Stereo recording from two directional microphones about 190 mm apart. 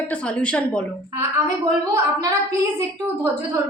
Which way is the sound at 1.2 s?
15° right (ahead or behind).